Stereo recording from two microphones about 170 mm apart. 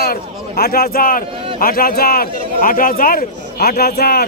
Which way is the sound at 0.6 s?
60° left (ahead or behind).